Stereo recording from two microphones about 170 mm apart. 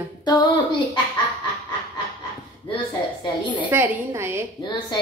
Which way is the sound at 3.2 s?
25° left (ahead or behind).